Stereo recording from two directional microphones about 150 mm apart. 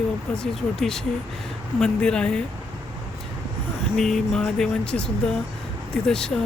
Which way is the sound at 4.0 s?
Centre (ahead or behind).